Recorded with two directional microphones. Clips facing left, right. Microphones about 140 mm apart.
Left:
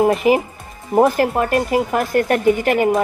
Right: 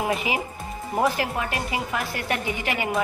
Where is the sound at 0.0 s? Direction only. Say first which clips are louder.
Left 11 dB; 50° left (ahead or behind).